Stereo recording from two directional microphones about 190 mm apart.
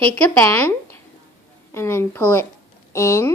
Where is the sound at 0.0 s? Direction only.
10° left (ahead or behind).